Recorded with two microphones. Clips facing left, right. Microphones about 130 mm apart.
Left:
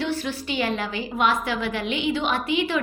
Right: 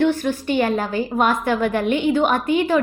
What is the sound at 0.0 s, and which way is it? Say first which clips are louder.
A woman's voice: right 8 dB; 50° right (ahead or behind).